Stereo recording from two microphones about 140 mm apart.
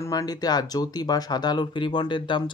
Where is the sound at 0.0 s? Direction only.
25° left (ahead or behind).